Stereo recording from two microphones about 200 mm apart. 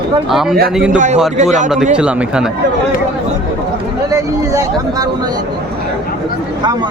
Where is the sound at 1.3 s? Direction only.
35° right (ahead or behind).